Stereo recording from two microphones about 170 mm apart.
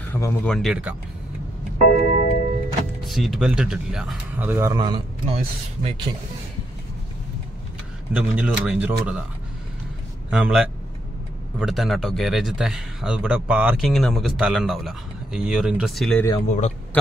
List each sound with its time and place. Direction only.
0.1 s speech: 15° left (ahead or behind)
0.6 s speech: 5° right (ahead or behind)
1.9 s tick-tock: 60° left (ahead or behind)
3.1 s speech: centre (ahead or behind); by 6.1 s 30° right (ahead or behind)
8.1 s speech: 5° right (ahead or behind)
10.3 s speech: 5° right (ahead or behind)
16.3 s a man's voice: 40° left (ahead or behind)
16.9 s a sound: 10° left (ahead or behind)